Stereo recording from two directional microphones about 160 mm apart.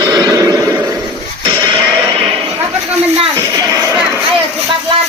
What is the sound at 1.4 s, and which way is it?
Music, 25° right (ahead or behind).